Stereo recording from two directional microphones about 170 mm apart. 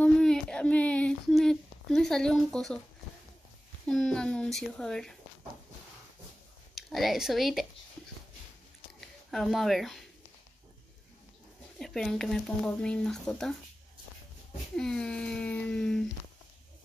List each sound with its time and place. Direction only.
0.0 s a sound: 5° left (ahead or behind)
3.8 s speech: 5° left (ahead or behind)
6.7 s speech: centre (ahead or behind)
9.0 s speech: centre (ahead or behind)
11.8 s speech: centre (ahead or behind)
14.8 s speech: 5° left (ahead or behind)